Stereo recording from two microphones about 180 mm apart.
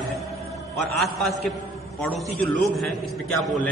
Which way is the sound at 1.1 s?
Centre (ahead or behind).